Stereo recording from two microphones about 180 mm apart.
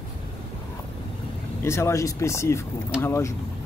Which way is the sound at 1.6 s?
15° left (ahead or behind).